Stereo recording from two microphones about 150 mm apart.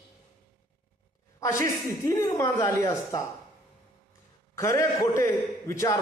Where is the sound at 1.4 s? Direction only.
20° left (ahead or behind).